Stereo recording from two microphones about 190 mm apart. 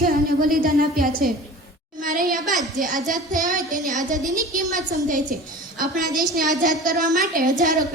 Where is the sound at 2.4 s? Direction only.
Centre (ahead or behind).